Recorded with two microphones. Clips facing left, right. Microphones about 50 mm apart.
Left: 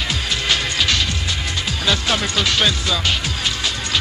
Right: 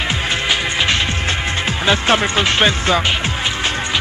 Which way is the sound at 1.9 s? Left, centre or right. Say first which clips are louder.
Right 5 dB; right.